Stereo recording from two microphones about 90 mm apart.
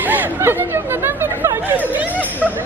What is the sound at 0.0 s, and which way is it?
Chatter, 20° right (ahead or behind).